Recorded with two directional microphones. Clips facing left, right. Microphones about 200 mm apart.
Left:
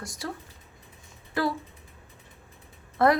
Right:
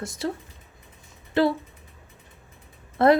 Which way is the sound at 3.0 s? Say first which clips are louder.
Right 4 dB; 25° right (ahead or behind).